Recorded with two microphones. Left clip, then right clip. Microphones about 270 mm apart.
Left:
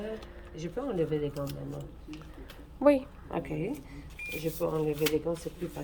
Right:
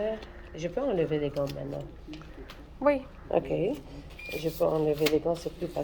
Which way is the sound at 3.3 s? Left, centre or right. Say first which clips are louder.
Right 8 dB; left.